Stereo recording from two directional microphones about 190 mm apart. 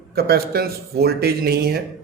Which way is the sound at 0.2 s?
55° right (ahead or behind).